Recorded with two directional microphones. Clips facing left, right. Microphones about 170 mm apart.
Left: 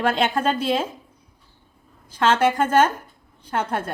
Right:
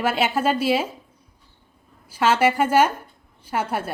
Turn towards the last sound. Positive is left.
turn(degrees=-10)  # may be behind; listen again after turning